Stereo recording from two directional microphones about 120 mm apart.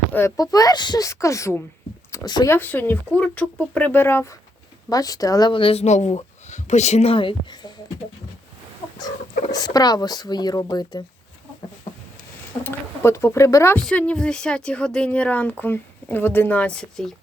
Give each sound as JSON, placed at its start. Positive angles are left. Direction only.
{"t": 0.1, "sound": "speech", "side_deg": 20}
{"t": 0.3, "sound": "speech", "side_deg": 30}
{"t": 2.5, "sound": "speech", "side_deg": 15}
{"t": 4.9, "sound": "speech", "side_deg": 30}
{"t": 5.5, "sound": "speech", "side_deg": 50}
{"t": 5.8, "sound": "speech", "side_deg": 80}
{"t": 9.0, "sound": "speech", "side_deg": 35}
{"t": 12.6, "sound": "speech", "side_deg": 20}
{"t": 13.7, "sound": "speech", "side_deg": 10}